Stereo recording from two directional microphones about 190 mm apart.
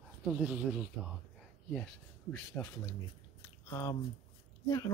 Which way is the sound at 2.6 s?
10° left (ahead or behind).